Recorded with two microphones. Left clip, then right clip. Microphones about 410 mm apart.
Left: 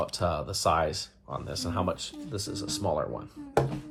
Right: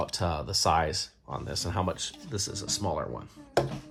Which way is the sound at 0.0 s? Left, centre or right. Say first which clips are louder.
Left 2 dB; centre.